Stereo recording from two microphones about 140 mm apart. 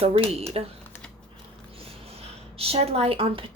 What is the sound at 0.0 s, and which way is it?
Speech, 45° right (ahead or behind).